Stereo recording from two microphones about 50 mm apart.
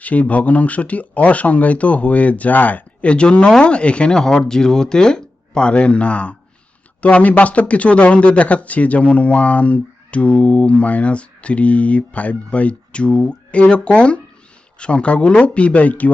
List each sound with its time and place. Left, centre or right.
0.0 s speech: left